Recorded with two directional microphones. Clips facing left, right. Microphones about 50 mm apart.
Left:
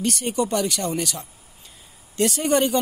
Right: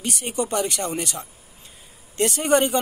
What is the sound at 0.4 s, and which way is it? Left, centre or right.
Speech, right.